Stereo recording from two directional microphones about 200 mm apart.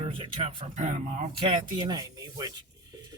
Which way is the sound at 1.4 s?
25° right (ahead or behind).